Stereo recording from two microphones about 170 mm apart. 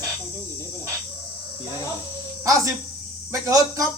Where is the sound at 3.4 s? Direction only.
20° right (ahead or behind).